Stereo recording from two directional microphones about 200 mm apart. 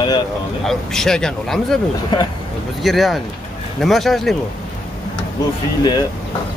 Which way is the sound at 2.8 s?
Centre (ahead or behind).